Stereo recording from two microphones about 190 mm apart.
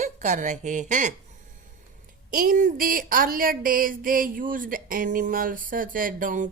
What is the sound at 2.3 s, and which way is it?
A woman's voice, 45° right (ahead or behind).